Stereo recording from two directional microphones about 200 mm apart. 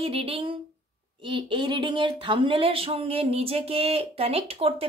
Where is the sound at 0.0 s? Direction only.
30° right (ahead or behind).